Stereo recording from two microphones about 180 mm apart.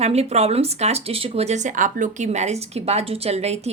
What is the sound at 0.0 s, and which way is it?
Speech, 35° right (ahead or behind).